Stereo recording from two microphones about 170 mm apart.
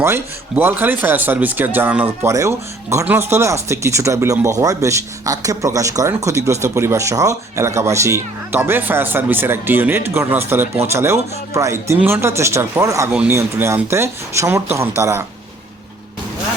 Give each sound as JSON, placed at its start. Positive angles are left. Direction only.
{"t": 0.0, "sound": "speech", "side_deg": -15}